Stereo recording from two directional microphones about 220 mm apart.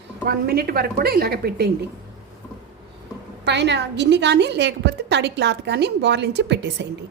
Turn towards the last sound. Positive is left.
turn(degrees=-50)  # may be behind; listen again after turning